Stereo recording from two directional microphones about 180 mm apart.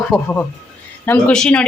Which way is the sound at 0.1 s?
5° left (ahead or behind).